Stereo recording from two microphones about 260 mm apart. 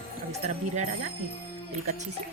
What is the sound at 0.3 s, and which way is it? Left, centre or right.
Speech, right.